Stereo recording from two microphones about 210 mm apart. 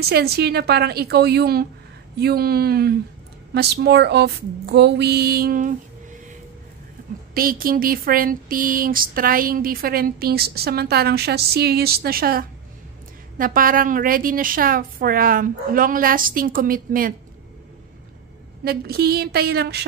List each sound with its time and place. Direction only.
0.0 s speech: 50° right (ahead or behind)
7.3 s speech: 45° right (ahead or behind)
18.6 s speech: 45° right (ahead or behind)